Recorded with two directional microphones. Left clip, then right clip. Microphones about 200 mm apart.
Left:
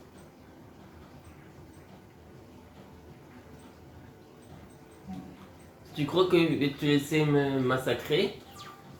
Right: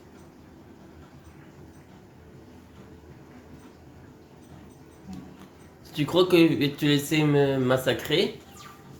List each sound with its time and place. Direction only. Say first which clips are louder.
5.9 s speech: right 4 dB; 55° right (ahead or behind)